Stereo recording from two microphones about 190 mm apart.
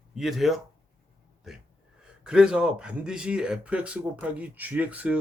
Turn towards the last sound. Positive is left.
turn(degrees=-5)  # may be behind; listen again after turning